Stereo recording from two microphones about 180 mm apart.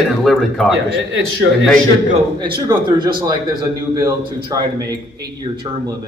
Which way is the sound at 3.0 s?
25° right (ahead or behind).